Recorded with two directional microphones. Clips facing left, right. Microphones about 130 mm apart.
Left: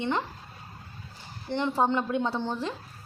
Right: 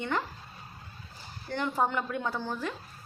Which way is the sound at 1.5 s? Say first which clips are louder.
Left 4 dB; 20° left (ahead or behind).